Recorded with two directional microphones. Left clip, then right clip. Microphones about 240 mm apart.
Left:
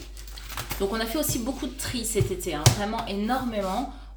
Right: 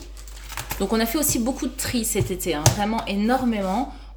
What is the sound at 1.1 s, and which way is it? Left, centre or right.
Speech, right.